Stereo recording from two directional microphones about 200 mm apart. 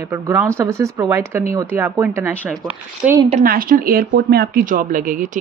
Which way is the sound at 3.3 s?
40° right (ahead or behind).